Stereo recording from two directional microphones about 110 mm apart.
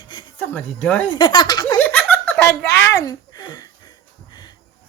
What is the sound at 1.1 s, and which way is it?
Speech, 45° left (ahead or behind).